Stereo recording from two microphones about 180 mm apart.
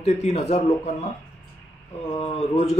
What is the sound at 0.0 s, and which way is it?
Speech, 40° left (ahead or behind).